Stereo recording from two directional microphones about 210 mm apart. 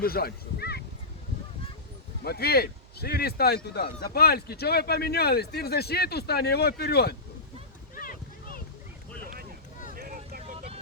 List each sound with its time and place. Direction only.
0.0 s speech: 45° left (ahead or behind)
2.2 s speech: 50° left (ahead or behind)
7.9 s a sound: 45° left (ahead or behind)
9.9 s vehicle: 45° right (ahead or behind)